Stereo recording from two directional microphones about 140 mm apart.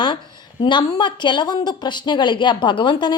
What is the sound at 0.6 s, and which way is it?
A woman's voice, 35° left (ahead or behind).